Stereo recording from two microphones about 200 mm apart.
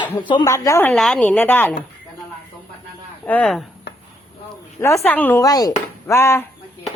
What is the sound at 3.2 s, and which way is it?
Speech, 5° left (ahead or behind).